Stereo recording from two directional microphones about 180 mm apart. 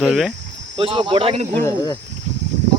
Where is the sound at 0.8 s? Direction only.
30° right (ahead or behind).